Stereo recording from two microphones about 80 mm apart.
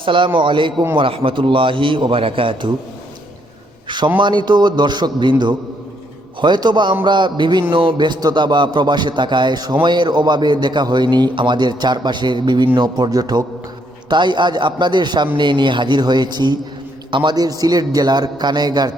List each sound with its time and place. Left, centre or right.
0.0 s a man's voice: right
3.8 s a man's voice: right
6.4 s a man's voice: right
14.1 s a man's voice: right